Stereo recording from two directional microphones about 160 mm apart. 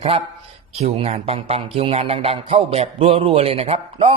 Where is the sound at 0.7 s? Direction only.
40° right (ahead or behind).